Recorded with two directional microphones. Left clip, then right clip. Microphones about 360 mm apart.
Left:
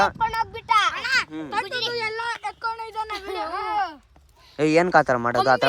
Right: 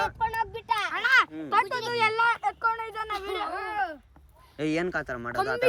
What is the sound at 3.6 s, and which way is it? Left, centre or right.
Speech, centre.